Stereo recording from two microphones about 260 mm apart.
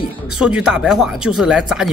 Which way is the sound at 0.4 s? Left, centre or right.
Centre.